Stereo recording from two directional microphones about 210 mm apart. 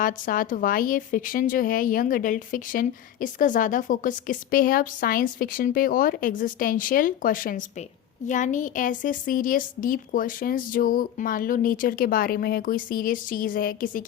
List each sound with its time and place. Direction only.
0.0 s a woman's voice: 40° left (ahead or behind)